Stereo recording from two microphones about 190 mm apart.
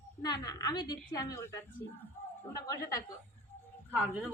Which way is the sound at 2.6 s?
20° left (ahead or behind).